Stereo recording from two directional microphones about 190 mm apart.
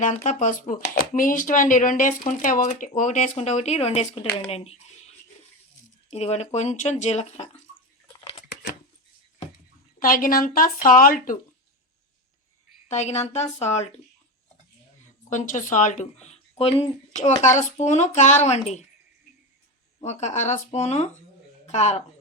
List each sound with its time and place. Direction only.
0.1 s speech: 40° left (ahead or behind)
10.0 s speech: 45° left (ahead or behind)
12.9 s speech: 35° left (ahead or behind)
15.3 s speech: 40° left (ahead or behind)
20.0 s speech: 35° left (ahead or behind)